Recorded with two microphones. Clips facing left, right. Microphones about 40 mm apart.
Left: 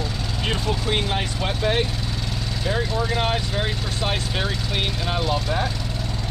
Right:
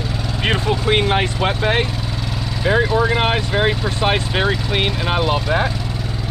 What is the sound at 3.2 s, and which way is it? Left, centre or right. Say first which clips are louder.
Speech: right 6 dB; right.